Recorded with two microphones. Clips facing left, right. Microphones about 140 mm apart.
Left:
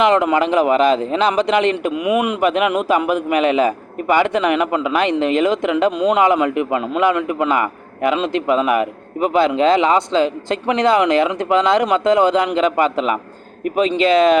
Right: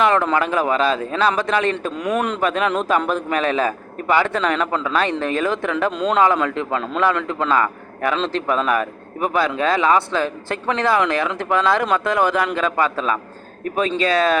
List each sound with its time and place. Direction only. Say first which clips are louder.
0.0 s a man's voice: left 3 dB; 15° left (ahead or behind)